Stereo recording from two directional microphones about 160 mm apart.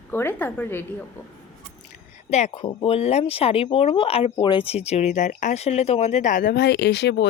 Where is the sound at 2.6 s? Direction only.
35° left (ahead or behind).